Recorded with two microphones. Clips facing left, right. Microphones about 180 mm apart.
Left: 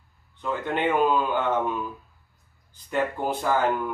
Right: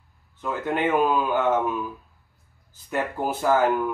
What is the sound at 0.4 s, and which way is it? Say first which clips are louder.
Speech: right 1 dB; 5° right (ahead or behind).